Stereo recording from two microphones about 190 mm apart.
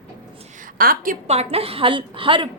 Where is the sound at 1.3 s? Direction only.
30° right (ahead or behind).